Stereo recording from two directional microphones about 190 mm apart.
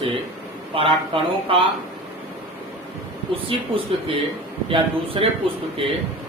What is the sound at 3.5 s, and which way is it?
A man's voice, 30° right (ahead or behind).